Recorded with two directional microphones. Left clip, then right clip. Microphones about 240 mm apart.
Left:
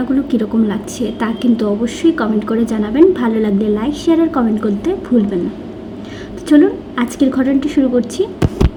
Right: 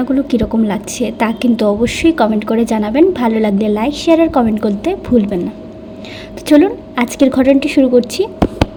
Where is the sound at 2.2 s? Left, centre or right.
Right.